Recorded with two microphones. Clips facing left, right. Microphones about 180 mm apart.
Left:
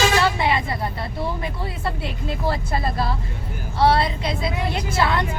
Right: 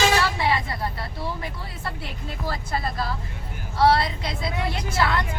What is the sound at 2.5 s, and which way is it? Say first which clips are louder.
A woman's voice: left 3 dB; 25° left (ahead or behind).